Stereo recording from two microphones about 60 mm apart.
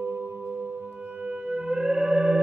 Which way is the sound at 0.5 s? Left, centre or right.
Right.